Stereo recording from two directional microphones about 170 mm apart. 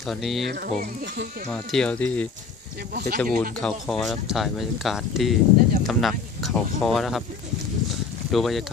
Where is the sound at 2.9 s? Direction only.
65° right (ahead or behind).